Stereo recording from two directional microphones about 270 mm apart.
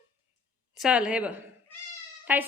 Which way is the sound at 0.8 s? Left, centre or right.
Centre.